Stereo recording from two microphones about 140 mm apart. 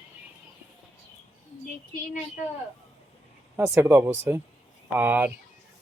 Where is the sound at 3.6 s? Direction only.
20° right (ahead or behind).